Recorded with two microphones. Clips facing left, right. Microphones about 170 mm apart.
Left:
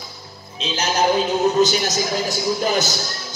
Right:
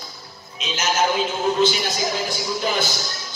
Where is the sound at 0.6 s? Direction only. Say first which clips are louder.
Left 2 dB; 35° left (ahead or behind).